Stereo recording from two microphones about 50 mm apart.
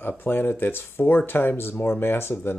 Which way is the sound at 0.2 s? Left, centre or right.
Left.